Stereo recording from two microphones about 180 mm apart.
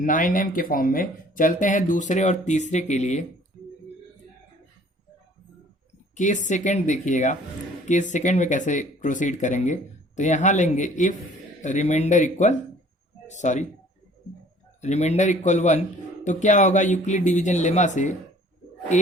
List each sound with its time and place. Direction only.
0.0 s speech: 50° left (ahead or behind)
6.1 s speech: 45° left (ahead or behind)
14.8 s speech: 40° left (ahead or behind)